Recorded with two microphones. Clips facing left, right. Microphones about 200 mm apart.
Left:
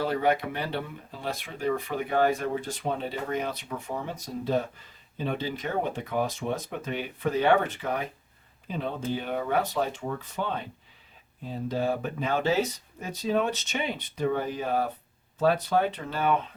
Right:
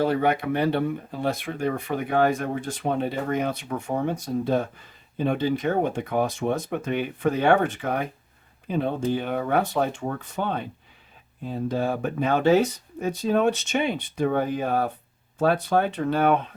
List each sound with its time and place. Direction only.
0.0 s speech: 55° right (ahead or behind)